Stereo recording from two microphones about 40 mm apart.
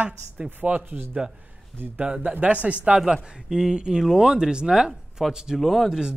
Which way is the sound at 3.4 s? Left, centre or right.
Centre.